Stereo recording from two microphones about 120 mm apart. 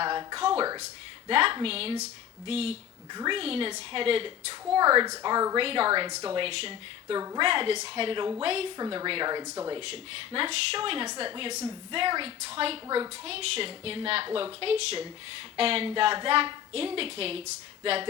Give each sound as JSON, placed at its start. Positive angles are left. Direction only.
{"t": 0.0, "sound": "a sound", "side_deg": -35}
{"t": 0.3, "sound": "a sound", "side_deg": -45}
{"t": 1.3, "sound": "a woman's voice", "side_deg": -50}
{"t": 3.1, "sound": "a woman's voice", "side_deg": -40}
{"t": 4.7, "sound": "speech", "side_deg": -35}
{"t": 5.5, "sound": "a woman's voice", "side_deg": -50}
{"t": 7.2, "sound": "speech", "side_deg": -30}
{"t": 7.4, "sound": "a woman's voice", "side_deg": -45}
{"t": 8.8, "sound": "speech", "side_deg": -35}
{"t": 9.8, "sound": "a woman's voice", "side_deg": -50}